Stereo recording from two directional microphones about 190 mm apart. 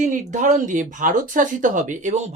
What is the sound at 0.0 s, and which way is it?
Speech, 40° right (ahead or behind).